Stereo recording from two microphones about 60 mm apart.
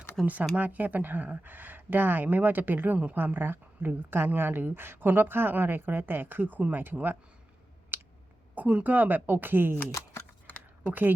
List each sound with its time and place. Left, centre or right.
0.3 s a woman's voice: right
7.9 s a sound: right
8.5 s a woman's voice: right
9.9 s a sound: left
10.5 s computer keyboard: left
10.8 s a woman's voice: right